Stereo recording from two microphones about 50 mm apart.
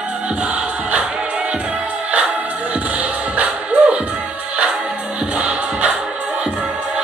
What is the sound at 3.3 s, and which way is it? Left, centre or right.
Music, right.